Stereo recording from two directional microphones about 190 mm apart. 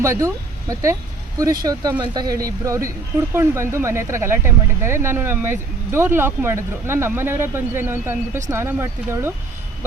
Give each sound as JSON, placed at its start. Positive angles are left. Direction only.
{"t": 0.0, "sound": "speech", "side_deg": -15}